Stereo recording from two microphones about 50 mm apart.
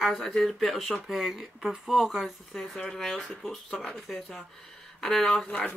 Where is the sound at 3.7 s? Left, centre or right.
Centre.